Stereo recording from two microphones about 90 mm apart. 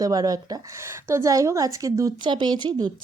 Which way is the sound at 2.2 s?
60° right (ahead or behind).